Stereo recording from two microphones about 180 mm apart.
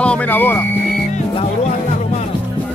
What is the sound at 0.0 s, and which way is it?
Music, 5° left (ahead or behind).